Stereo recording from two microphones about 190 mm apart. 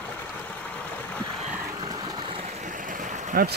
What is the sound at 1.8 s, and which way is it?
Stream, 20° right (ahead or behind).